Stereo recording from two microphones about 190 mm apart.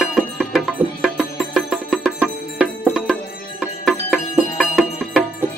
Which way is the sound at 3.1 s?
5° left (ahead or behind).